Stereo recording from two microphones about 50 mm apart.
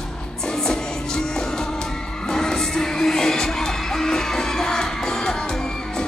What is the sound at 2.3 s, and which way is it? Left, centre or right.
Music, centre.